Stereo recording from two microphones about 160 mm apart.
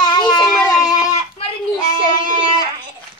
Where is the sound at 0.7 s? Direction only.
20° left (ahead or behind).